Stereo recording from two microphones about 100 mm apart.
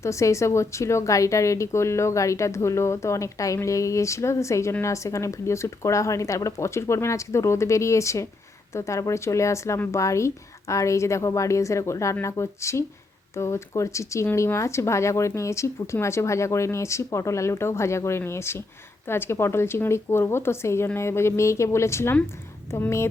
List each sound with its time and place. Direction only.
0.0 s a woman's voice: 30° left (ahead or behind)